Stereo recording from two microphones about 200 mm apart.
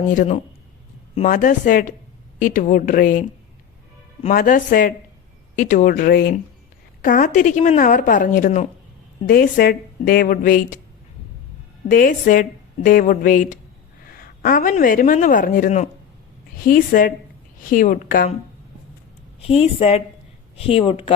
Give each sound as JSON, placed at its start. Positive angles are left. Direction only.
{"t": 0.1, "sound": "a woman's voice", "side_deg": 40}
{"t": 4.3, "sound": "a woman's voice", "side_deg": 40}
{"t": 11.9, "sound": "a woman's voice", "side_deg": 45}
{"t": 19.4, "sound": "a woman's voice", "side_deg": 30}